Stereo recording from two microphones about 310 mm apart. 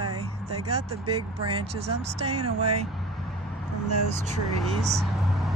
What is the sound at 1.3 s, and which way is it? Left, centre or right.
Speech, centre.